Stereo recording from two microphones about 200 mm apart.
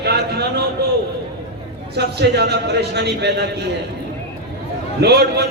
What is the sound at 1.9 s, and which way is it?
A man's voice, 55° right (ahead or behind).